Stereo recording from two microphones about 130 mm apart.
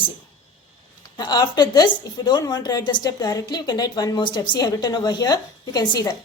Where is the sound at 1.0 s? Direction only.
35° left (ahead or behind).